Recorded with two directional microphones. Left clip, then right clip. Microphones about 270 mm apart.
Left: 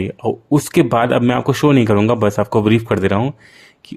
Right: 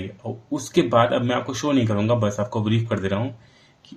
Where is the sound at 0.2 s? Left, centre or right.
Left.